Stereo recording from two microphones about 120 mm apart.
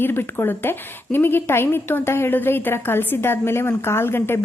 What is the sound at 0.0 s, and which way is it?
A woman's voice, 20° left (ahead or behind).